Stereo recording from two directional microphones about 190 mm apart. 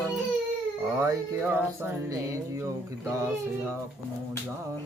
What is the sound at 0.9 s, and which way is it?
Music, 15° right (ahead or behind).